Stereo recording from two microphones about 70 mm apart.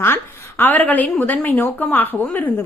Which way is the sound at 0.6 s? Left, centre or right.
Left.